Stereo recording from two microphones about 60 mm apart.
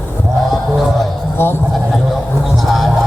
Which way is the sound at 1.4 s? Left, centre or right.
Left.